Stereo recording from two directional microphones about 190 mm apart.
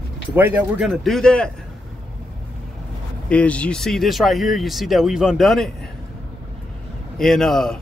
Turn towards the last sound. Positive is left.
turn(degrees=0)  # may be behind; listen again after turning